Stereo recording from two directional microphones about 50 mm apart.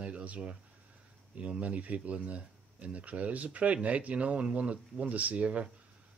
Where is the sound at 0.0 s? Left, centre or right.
Right.